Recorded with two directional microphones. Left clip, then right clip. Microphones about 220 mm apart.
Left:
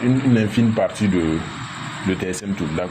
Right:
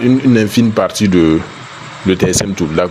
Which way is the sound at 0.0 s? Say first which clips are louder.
Right 8 dB; 60° right (ahead or behind).